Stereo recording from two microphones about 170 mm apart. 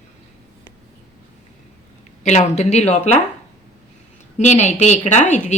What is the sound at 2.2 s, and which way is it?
Speech, 40° left (ahead or behind).